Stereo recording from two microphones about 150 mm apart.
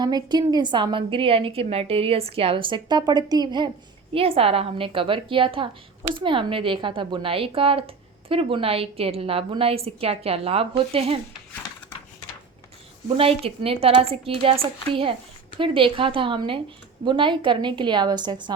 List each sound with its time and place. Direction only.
0.0 s a woman's voice: 30° right (ahead or behind)
4.1 s a woman's voice: 40° right (ahead or behind)
13.1 s a woman's voice: 40° right (ahead or behind)